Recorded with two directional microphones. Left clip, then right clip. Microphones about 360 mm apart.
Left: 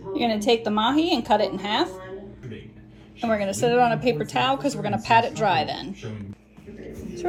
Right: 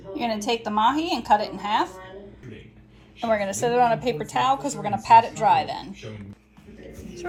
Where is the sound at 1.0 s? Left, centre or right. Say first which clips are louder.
Left 4 dB; centre.